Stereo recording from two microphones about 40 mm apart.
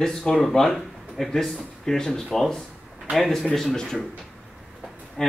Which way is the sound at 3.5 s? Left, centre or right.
Centre.